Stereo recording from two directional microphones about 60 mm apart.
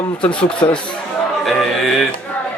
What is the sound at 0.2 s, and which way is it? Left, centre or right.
Speech, centre.